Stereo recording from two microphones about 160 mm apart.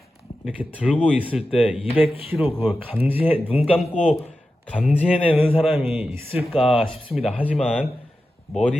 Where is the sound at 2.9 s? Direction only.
10° right (ahead or behind).